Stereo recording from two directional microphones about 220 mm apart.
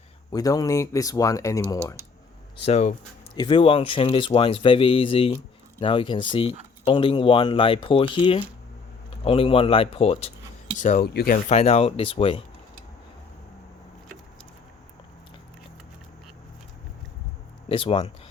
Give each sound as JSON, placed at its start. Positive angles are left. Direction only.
{"t": 0.3, "sound": "speech", "side_deg": 15}
{"t": 2.6, "sound": "speech", "side_deg": 30}
{"t": 10.8, "sound": "speech", "side_deg": 35}
{"t": 11.4, "sound": "speech", "side_deg": 30}
{"t": 17.7, "sound": "speech", "side_deg": 25}